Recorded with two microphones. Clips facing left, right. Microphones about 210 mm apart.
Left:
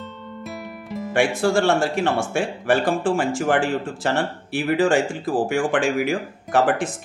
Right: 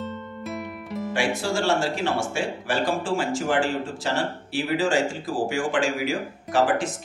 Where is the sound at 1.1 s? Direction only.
55° left (ahead or behind).